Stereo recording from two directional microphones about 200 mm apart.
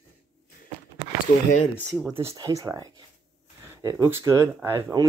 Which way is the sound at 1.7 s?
Centre (ahead or behind).